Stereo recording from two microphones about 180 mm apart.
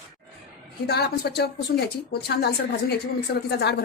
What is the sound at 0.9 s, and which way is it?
Speech, 65° left (ahead or behind).